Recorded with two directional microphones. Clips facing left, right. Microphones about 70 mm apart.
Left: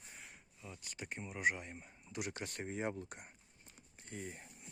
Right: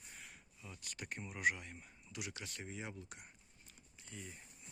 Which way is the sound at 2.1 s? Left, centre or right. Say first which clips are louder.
Left 5 dB; left.